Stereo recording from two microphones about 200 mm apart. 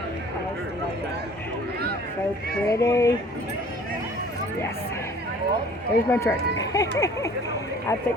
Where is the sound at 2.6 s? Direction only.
15° left (ahead or behind).